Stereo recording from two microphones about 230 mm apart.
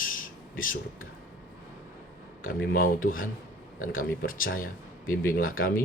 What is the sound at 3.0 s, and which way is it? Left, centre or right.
Speech, left.